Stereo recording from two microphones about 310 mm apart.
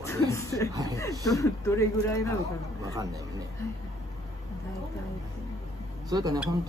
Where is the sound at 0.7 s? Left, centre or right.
Centre.